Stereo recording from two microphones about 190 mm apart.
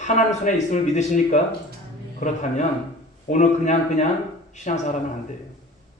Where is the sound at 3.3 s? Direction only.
40° left (ahead or behind).